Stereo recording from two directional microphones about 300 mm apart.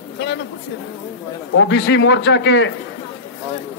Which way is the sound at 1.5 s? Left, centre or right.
Left.